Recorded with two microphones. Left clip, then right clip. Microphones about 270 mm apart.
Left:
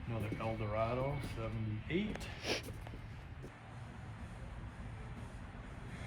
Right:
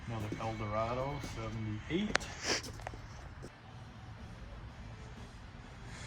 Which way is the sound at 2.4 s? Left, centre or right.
Centre.